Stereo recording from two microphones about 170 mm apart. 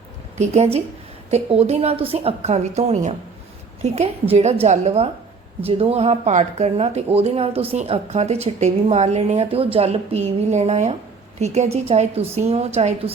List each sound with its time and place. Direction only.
0.3 s speech: 40° right (ahead or behind)